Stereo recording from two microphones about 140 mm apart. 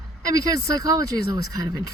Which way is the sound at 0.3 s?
25° right (ahead or behind).